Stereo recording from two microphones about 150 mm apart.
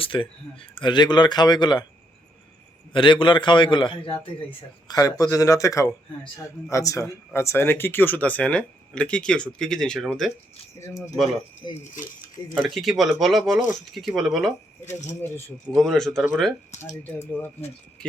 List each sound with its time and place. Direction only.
0.0 s a man's voice: 35° left (ahead or behind)
2.9 s a man's voice: 35° left (ahead or behind)
4.9 s a man's voice: 20° left (ahead or behind); by 10.3 s centre (ahead or behind)
10.8 s a man's voice: 20° left (ahead or behind)
11.7 s speech: 50° left (ahead or behind)
12.5 s speech: centre (ahead or behind)
15.2 s speech: 15° left (ahead or behind)
15.8 s speech: centre (ahead or behind)